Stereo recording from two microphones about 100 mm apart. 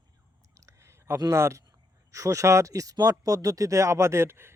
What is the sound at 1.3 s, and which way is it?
Speech, 30° right (ahead or behind).